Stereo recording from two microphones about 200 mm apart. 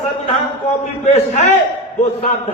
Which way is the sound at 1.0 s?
35° left (ahead or behind).